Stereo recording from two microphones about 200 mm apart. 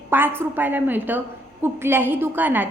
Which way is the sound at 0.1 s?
10° right (ahead or behind).